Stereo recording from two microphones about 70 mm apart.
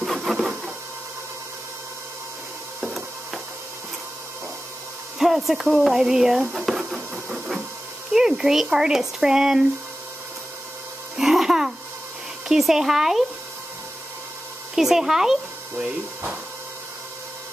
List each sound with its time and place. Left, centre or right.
0.0 s printer: centre
5.2 s a sound: centre
8.1 s speech: centre
11.1 s music: centre
12.4 s speech: centre
14.8 s speech: centre